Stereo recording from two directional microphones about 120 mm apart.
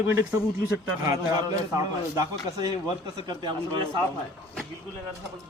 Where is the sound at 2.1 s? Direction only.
30° right (ahead or behind).